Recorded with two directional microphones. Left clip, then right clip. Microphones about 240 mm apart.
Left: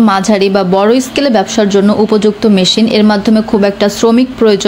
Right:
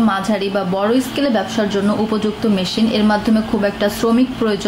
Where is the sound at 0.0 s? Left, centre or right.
Left.